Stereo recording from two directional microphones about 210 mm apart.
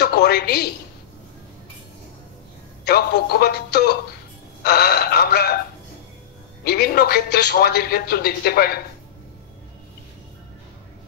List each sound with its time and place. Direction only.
0.0 s a woman's voice: 50° left (ahead or behind)
2.8 s speech: 50° left (ahead or behind)
6.6 s speech: 50° left (ahead or behind)